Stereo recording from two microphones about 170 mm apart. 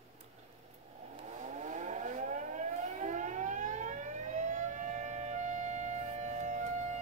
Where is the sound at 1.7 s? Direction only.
45° right (ahead or behind).